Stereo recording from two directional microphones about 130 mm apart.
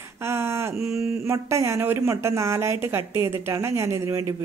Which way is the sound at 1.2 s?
20° right (ahead or behind).